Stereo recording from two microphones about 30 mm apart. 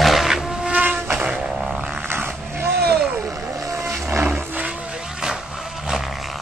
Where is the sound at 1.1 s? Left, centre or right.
Right.